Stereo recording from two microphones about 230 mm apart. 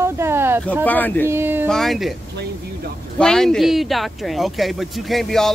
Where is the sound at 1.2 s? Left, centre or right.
Centre.